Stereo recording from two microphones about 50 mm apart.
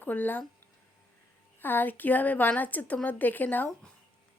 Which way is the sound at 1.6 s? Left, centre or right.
Left.